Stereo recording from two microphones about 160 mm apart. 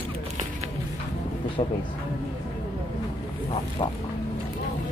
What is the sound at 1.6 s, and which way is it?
Speech, 40° left (ahead or behind).